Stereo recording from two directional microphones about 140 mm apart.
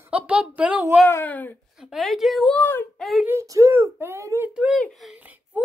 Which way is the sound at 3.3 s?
20° right (ahead or behind).